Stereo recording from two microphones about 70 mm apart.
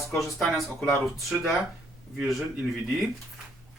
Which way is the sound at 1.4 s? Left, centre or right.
Centre.